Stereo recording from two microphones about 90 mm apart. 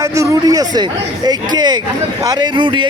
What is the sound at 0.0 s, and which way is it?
Speech, 40° right (ahead or behind).